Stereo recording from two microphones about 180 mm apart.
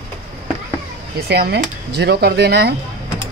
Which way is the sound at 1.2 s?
60° right (ahead or behind).